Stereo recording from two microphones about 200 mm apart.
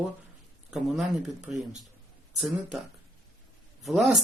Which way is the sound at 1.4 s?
35° right (ahead or behind).